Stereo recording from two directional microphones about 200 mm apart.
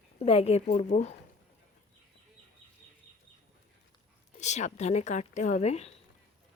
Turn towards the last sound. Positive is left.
turn(degrees=30)  # may be behind; listen again after turning